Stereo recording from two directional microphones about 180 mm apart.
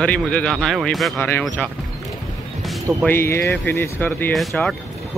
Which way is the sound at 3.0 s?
15° left (ahead or behind).